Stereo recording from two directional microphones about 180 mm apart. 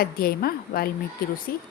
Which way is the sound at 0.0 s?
55° left (ahead or behind).